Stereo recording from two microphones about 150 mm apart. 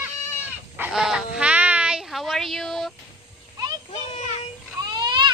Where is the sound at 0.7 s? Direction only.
10° right (ahead or behind).